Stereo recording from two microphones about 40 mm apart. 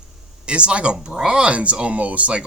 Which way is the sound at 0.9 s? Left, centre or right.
Centre.